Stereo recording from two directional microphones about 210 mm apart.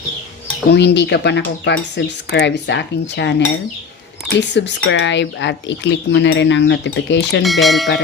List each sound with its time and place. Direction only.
0.7 s speech: 55° left (ahead or behind)
4.4 s speech: 55° left (ahead or behind)
7.4 s speech: centre (ahead or behind)